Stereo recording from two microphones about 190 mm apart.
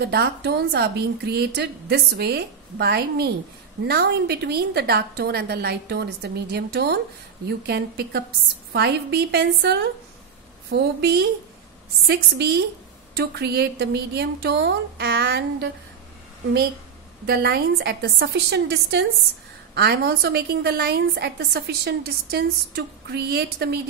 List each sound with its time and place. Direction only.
0.0 s a woman's voice: 60° right (ahead or behind)
17.3 s a woman's voice: 55° right (ahead or behind)